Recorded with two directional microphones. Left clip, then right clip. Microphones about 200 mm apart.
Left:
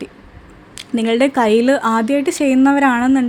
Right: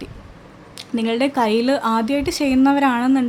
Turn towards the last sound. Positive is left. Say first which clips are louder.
# left 3 dB
turn(degrees=10)  # may be behind; listen again after turning